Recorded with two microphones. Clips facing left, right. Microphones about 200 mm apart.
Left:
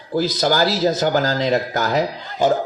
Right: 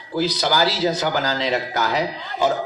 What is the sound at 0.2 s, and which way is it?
A man's voice, 45° left (ahead or behind).